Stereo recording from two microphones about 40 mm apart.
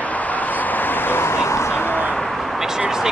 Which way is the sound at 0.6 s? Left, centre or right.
Left.